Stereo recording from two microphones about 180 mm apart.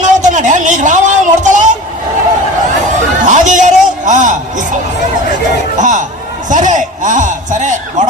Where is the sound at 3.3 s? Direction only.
45° right (ahead or behind).